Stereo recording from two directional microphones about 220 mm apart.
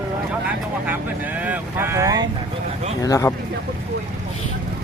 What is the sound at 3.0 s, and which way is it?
Speech, 15° left (ahead or behind).